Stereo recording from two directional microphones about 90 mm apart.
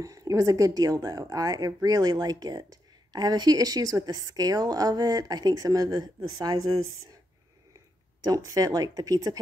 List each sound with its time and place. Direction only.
0.0 s a woman's voice: 40° right (ahead or behind)
8.3 s a woman's voice: 40° right (ahead or behind)